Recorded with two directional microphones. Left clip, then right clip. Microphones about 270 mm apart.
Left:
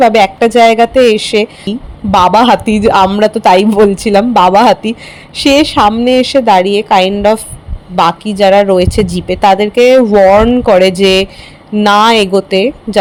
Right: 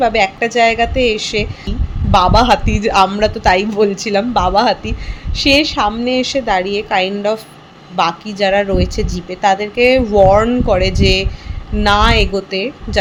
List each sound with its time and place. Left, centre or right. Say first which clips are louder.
0.0 s a woman's voice: left 7 dB; left